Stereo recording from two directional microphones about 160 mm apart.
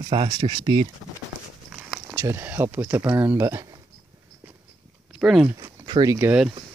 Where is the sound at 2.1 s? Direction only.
15° right (ahead or behind).